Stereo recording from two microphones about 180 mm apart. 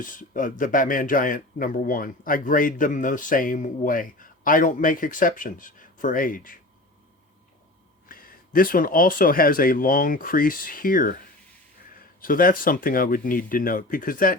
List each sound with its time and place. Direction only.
0.0 s speech: 50° left (ahead or behind)
8.0 s speech: 55° left (ahead or behind)
12.2 s speech: 50° left (ahead or behind)